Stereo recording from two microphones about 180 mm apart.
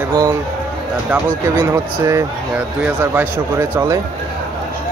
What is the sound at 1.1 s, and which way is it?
Speech, 15° right (ahead or behind).